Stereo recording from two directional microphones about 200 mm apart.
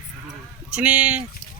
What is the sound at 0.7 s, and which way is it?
Speech, 5° right (ahead or behind).